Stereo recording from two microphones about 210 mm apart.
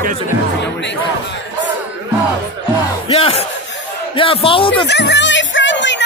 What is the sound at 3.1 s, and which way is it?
Speech, 30° left (ahead or behind).